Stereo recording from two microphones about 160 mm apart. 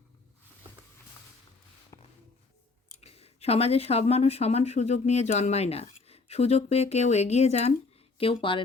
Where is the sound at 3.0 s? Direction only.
40° left (ahead or behind).